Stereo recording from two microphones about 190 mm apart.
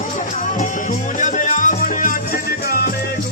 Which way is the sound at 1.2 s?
40° left (ahead or behind).